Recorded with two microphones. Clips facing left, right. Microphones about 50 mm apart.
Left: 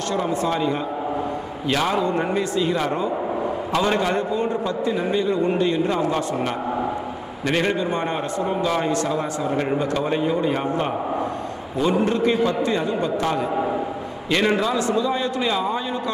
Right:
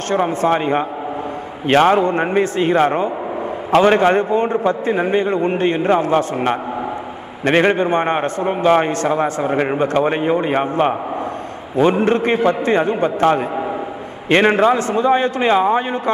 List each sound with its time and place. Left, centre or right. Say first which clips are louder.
0.1 s a man's voice: right 7 dB; right